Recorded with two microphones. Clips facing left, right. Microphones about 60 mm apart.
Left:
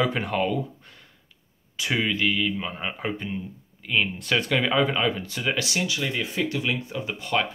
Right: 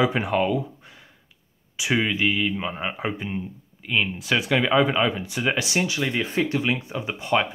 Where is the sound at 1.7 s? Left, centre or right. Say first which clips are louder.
Right 2 dB; centre.